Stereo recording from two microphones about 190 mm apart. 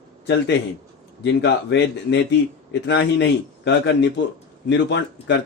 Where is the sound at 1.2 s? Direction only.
65° left (ahead or behind).